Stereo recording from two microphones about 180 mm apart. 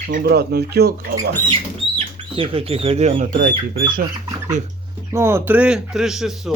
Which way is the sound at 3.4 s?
55° right (ahead or behind).